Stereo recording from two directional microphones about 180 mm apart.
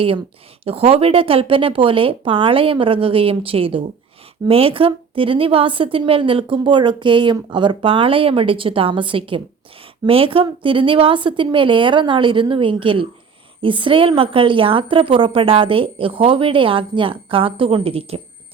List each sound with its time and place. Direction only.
0.6 s a woman's voice: 35° right (ahead or behind)